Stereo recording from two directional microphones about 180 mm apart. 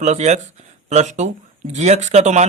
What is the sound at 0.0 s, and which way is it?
A man's voice, 40° right (ahead or behind).